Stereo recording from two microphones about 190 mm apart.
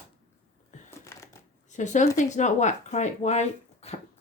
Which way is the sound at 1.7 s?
40° left (ahead or behind).